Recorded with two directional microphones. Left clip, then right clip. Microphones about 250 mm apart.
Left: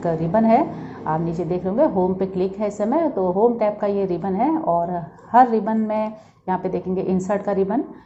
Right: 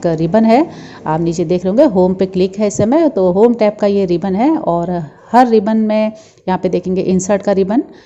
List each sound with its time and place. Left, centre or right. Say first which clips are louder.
0.0 s a woman's voice: right 7 dB; right